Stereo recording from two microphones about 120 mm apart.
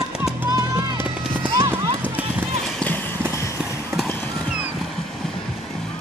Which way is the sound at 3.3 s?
25° left (ahead or behind).